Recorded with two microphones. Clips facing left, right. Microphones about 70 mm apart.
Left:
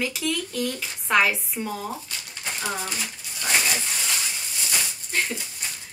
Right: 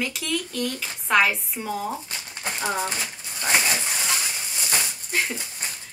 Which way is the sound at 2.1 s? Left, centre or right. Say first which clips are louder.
Right 2 dB; right.